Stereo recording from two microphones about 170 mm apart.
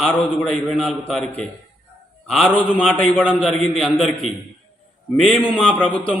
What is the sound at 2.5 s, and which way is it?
A man's voice, 10° left (ahead or behind).